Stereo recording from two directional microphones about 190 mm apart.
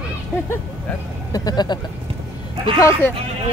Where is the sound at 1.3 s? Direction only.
20° left (ahead or behind).